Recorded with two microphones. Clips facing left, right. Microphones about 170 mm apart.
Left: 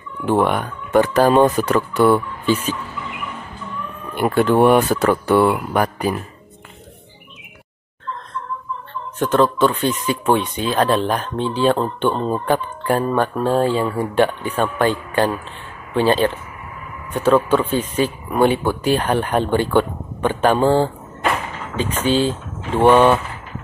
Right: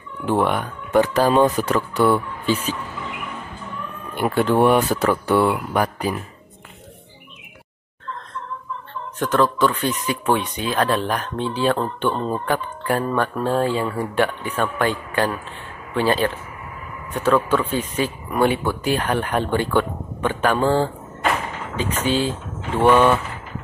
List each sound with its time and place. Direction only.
0.3 s speech: 50° left (ahead or behind)
4.2 s speech: 50° left (ahead or behind)
9.2 s speech: 25° left (ahead or behind)